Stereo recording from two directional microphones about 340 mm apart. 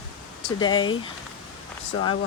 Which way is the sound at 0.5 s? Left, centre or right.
Centre.